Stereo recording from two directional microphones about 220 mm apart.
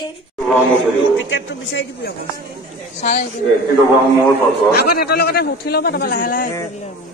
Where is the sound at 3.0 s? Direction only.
35° left (ahead or behind).